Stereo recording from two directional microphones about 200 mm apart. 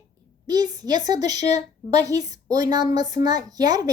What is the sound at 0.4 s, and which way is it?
A woman's voice, 20° right (ahead or behind).